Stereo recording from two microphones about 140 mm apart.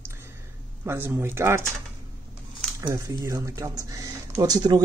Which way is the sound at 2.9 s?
25° right (ahead or behind).